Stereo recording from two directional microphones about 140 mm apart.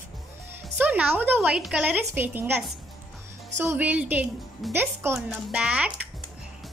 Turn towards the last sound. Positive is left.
turn(degrees=-10)  # may be behind; listen again after turning